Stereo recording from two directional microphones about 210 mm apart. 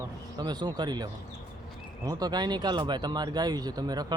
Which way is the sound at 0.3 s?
20° right (ahead or behind).